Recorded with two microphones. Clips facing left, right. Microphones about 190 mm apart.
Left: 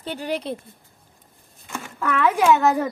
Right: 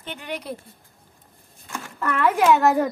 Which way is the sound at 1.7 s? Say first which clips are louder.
Left 2 dB; centre (ahead or behind).